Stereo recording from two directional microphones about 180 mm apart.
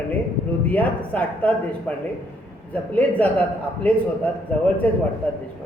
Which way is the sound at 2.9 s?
10° left (ahead or behind).